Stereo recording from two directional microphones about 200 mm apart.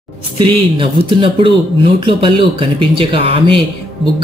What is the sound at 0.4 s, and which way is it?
Speech, 25° right (ahead or behind).